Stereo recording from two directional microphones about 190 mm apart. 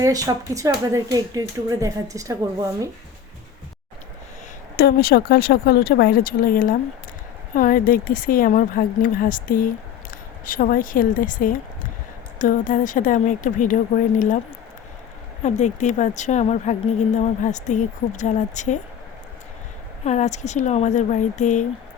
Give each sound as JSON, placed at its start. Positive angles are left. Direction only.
{"t": 0.0, "sound": "speech", "side_deg": -20}
{"t": 4.8, "sound": "speech", "side_deg": 55}
{"t": 15.4, "sound": "a woman's voice", "side_deg": 40}
{"t": 20.1, "sound": "a woman's voice", "side_deg": 40}